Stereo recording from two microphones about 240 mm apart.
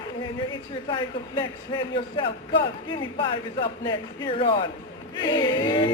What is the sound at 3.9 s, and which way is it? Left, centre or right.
Speech, left.